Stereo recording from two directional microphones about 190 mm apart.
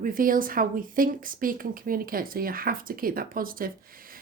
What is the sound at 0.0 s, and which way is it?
Speech, 45° right (ahead or behind).